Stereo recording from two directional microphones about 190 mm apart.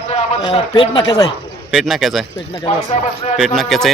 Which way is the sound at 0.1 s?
30° left (ahead or behind).